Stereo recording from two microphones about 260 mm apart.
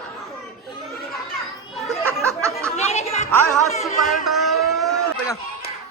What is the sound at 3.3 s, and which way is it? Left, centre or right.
Speech, centre.